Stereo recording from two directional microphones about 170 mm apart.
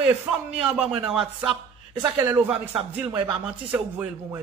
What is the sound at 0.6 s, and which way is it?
Speech, 5° right (ahead or behind).